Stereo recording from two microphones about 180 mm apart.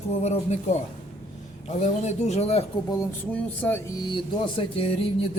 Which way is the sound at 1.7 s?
40° left (ahead or behind).